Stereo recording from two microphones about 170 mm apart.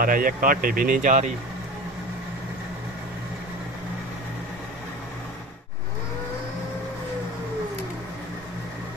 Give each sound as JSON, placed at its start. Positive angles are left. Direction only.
{"t": 0.0, "sound": "speech", "side_deg": -55}